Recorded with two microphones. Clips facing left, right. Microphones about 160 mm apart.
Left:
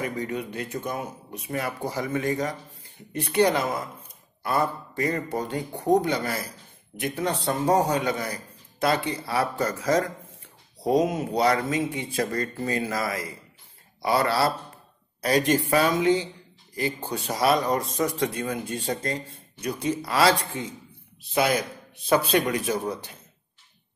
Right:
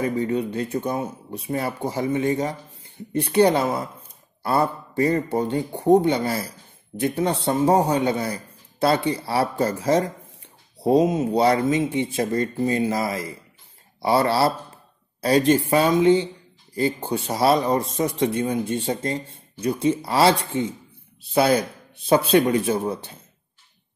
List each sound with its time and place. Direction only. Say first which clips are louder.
0.0 s a man's voice: right 7 dB; 30° right (ahead or behind)